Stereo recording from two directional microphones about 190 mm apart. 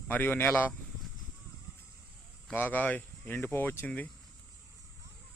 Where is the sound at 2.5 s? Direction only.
10° left (ahead or behind).